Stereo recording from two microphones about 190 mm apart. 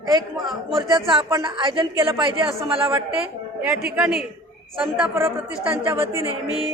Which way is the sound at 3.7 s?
5° right (ahead or behind).